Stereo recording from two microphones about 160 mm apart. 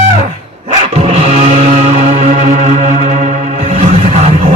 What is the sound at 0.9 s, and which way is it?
Music, 50° right (ahead or behind).